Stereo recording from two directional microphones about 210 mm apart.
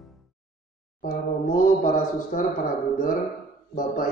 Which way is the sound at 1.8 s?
40° left (ahead or behind).